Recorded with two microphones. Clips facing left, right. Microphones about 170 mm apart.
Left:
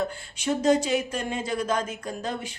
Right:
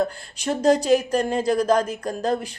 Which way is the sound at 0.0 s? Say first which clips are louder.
Right 4 dB; 35° right (ahead or behind).